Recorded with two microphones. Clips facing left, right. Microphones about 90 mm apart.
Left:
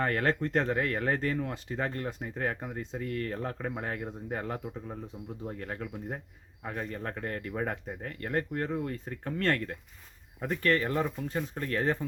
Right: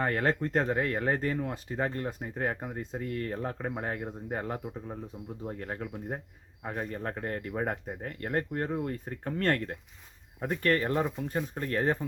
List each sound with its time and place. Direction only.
0.0 s a man's voice: 25° right (ahead or behind)